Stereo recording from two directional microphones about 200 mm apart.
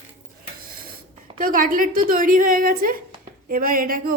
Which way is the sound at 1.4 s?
45° right (ahead or behind).